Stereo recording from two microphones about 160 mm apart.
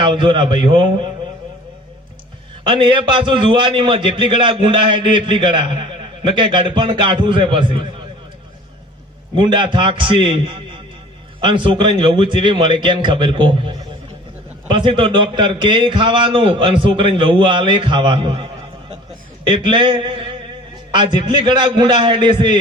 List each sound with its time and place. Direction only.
0.0 s a man's voice: 30° right (ahead or behind)
2.6 s a man's voice: 30° right (ahead or behind)
9.3 s a man's voice: 30° right (ahead or behind)